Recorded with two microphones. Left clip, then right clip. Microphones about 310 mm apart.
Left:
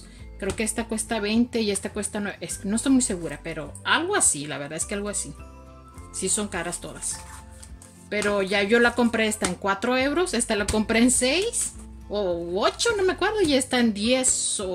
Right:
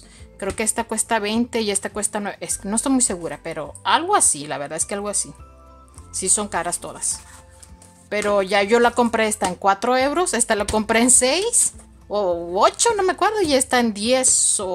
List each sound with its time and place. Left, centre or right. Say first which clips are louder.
0.4 s speech: right 4 dB; centre
8.1 s speech: right 5 dB; centre
12.5 s speech: right 6 dB; right